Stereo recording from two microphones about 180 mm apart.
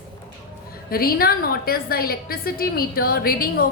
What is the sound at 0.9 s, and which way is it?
A woman's voice, 55° left (ahead or behind).